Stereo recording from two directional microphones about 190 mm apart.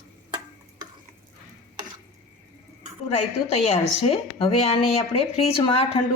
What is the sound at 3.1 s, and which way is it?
A woman's voice, 35° left (ahead or behind).